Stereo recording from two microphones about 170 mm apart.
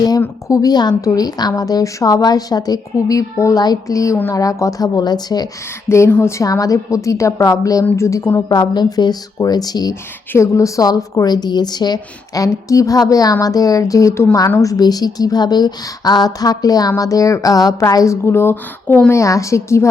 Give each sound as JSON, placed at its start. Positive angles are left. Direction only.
{"t": 0.2, "sound": "a woman's voice", "side_deg": 20}